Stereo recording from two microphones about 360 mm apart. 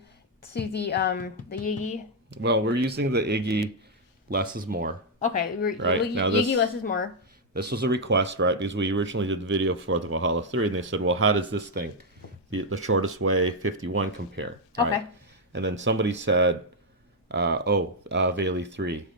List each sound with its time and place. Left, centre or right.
0.5 s a woman's voice: left
2.3 s speech: right
6.6 s a woman's voice: left
7.5 s speech: right